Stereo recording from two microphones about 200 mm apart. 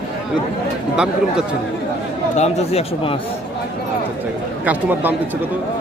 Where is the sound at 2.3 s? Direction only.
35° left (ahead or behind).